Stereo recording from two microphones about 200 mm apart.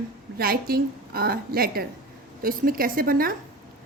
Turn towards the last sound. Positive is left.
turn(degrees=-45)  # may be behind; listen again after turning